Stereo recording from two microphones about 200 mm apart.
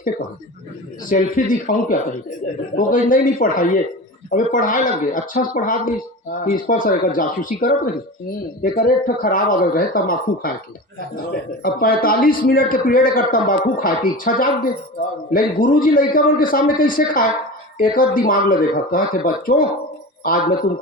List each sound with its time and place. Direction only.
1.1 s a man's voice: 40° left (ahead or behind)
11.6 s a man's voice: 45° left (ahead or behind)